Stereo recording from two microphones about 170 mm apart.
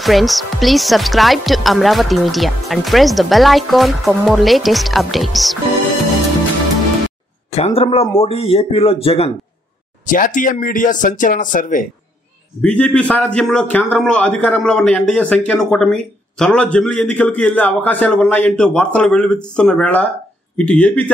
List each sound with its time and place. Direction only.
0.0 s speech: centre (ahead or behind)
7.5 s speech: 35° left (ahead or behind)
10.0 s speech: 50° left (ahead or behind)
12.6 s a man's voice: 5° left (ahead or behind)